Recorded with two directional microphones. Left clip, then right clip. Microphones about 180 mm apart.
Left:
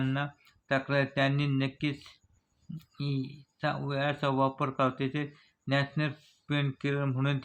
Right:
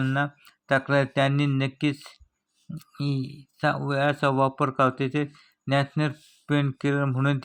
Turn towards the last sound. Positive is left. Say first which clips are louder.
# right 6 dB
turn(degrees=-35)  # may be behind; listen again after turning